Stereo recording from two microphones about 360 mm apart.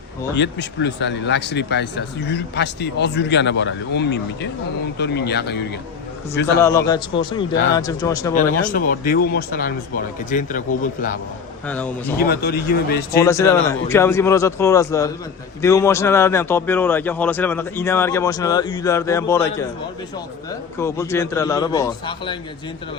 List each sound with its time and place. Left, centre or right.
0.3 s speech: left
6.6 s a man's voice: centre
8.4 s speech: left
11.6 s speech: centre
12.1 s speech: left
13.2 s a man's voice: centre